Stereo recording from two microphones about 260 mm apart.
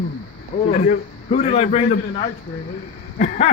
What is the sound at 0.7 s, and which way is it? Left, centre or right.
A man's voice, left.